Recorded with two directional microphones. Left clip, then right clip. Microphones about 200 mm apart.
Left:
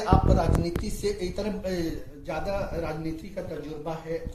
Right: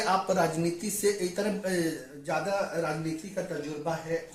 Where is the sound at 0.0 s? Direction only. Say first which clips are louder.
Left 1 dB; 60° right (ahead or behind); by 2.6 s 40° right (ahead or behind).